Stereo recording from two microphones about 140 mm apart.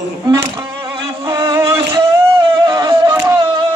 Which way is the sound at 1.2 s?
20° right (ahead or behind).